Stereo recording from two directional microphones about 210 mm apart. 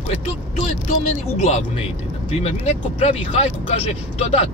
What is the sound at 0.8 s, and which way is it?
Speech, 30° left (ahead or behind).